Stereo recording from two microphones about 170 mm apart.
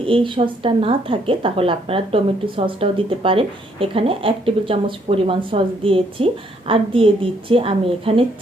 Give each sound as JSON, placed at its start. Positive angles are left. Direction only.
{"t": 0.0, "sound": "a woman's voice", "side_deg": -30}